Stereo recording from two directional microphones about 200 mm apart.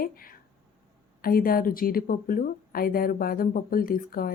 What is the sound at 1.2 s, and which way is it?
A woman's voice, 45° left (ahead or behind).